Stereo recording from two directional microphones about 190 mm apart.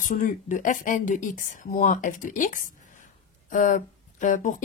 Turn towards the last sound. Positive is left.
turn(degrees=40)  # may be behind; listen again after turning